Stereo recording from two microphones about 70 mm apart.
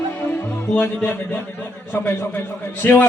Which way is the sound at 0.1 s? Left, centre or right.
Left.